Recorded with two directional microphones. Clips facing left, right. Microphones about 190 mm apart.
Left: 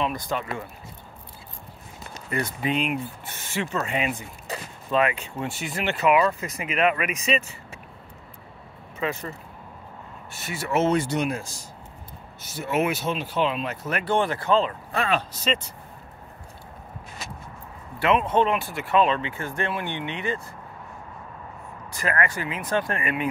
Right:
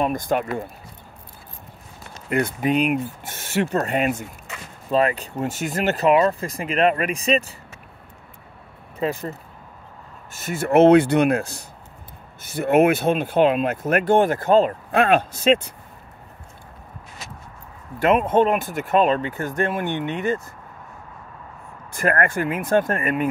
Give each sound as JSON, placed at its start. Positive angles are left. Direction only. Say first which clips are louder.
{"t": 0.0, "sound": "speech", "louder": "right 6 dB", "side_deg": -50}
{"t": 2.2, "sound": "speech", "louder": "right 6 dB", "side_deg": -60}
{"t": 4.5, "sound": "a sound", "louder": "left 4 dB", "side_deg": 35}
{"t": 4.9, "sound": "speech", "louder": "right 3 dB", "side_deg": -35}
{"t": 9.0, "sound": "speech", "louder": "right 4 dB", "side_deg": -35}
{"t": 10.3, "sound": "speech", "louder": "right 8 dB", "side_deg": -50}
{"t": 17.9, "sound": "speech", "louder": "right 4 dB", "side_deg": -45}
{"t": 21.9, "sound": "speech", "louder": "right 6 dB", "side_deg": -50}